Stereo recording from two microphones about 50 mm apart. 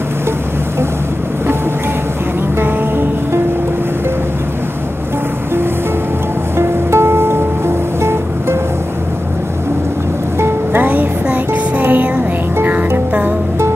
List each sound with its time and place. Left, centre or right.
6.6 s music: right
10.8 s music: right